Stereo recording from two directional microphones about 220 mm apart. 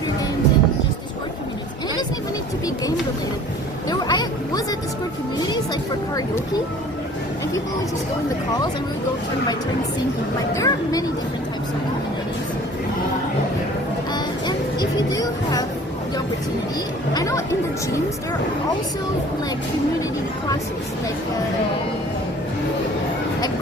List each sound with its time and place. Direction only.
3.8 s speech: 20° left (ahead or behind)
10.5 s speech: 15° left (ahead or behind)
14.1 s music: 20° left (ahead or behind)
17.2 s speech: 15° left (ahead or behind)